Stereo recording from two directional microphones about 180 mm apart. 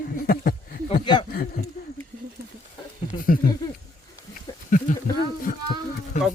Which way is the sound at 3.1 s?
30° left (ahead or behind).